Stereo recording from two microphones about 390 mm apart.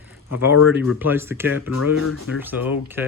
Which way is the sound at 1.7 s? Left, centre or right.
Left.